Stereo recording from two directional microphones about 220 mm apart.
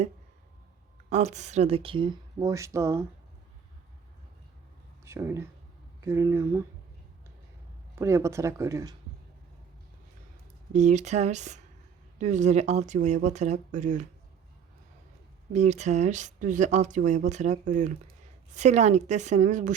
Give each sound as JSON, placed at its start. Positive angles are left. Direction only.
{"t": 1.1, "sound": "speech", "side_deg": -30}
{"t": 5.0, "sound": "speech", "side_deg": -10}
{"t": 7.9, "sound": "speech", "side_deg": -10}
{"t": 10.7, "sound": "speech", "side_deg": -30}
{"t": 15.5, "sound": "speech", "side_deg": -30}